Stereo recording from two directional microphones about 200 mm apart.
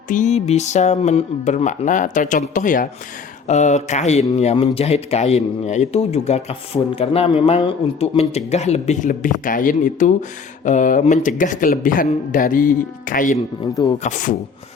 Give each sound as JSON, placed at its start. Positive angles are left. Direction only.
{"t": 0.1, "sound": "speech", "side_deg": 35}
{"t": 13.7, "sound": "speech", "side_deg": 15}
{"t": 14.0, "sound": "speech", "side_deg": 40}